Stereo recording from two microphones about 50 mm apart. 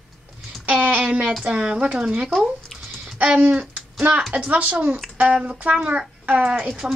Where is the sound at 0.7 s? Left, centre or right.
Right.